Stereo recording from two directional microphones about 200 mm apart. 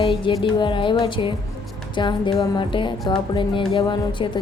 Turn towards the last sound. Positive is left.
turn(degrees=25)  # may be behind; listen again after turning